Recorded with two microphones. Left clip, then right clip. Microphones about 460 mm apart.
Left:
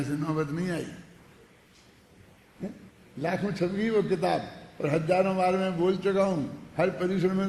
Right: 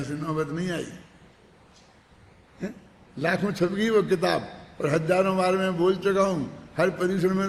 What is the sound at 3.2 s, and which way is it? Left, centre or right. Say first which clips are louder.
A man's voice: right 4 dB; centre.